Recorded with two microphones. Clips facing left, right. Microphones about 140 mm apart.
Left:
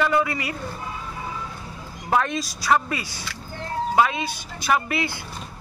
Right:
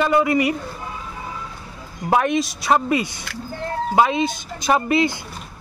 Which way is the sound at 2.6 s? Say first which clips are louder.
Right 1 dB; 20° right (ahead or behind).